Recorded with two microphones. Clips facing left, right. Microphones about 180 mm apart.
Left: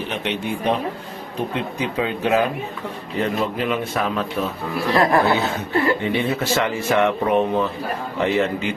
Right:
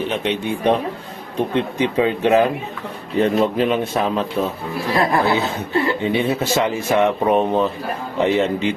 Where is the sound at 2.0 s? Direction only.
25° right (ahead or behind).